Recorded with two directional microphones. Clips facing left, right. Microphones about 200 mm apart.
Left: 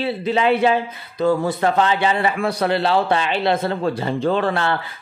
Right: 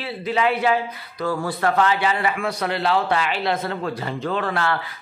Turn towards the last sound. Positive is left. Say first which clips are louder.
# left 4 dB
turn(degrees=25)  # may be behind; listen again after turning